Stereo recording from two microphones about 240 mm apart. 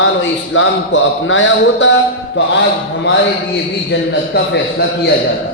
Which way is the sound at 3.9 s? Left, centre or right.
Left.